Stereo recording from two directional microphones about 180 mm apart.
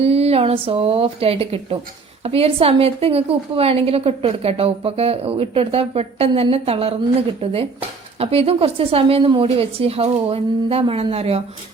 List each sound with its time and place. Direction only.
0.0 s a woman's voice: 35° right (ahead or behind)